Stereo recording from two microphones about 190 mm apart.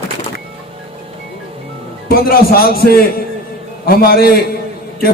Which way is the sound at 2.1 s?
50° left (ahead or behind).